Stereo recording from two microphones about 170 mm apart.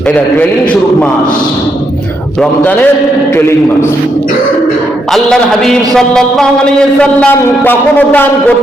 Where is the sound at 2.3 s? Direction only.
5° left (ahead or behind).